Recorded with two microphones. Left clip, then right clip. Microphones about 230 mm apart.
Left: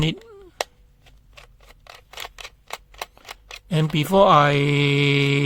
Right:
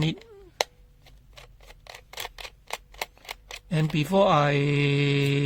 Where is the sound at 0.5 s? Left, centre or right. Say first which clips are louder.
Right 1 dB; centre.